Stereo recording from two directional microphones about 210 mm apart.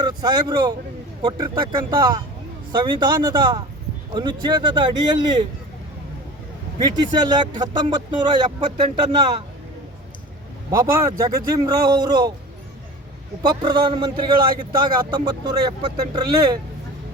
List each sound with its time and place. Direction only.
0.0 s a man's voice: 20° right (ahead or behind)
6.7 s a man's voice: 20° right (ahead or behind)
10.7 s speech: 15° right (ahead or behind)
13.4 s a man's voice: 20° right (ahead or behind)